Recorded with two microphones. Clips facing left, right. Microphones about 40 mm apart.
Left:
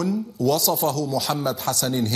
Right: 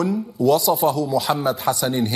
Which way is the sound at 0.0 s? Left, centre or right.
Centre.